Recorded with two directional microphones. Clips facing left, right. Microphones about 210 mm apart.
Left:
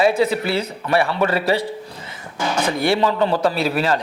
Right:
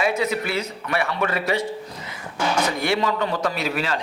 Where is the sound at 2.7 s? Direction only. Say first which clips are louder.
Left 4 dB; 30° left (ahead or behind).